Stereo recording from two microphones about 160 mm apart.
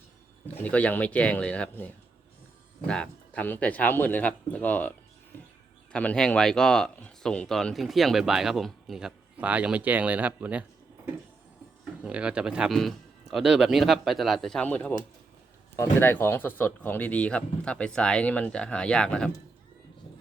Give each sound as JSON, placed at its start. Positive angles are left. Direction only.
{"t": 0.4, "sound": "speech", "side_deg": 10}